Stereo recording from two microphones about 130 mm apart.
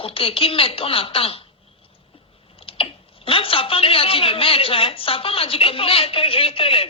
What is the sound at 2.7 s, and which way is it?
Speech, 45° left (ahead or behind).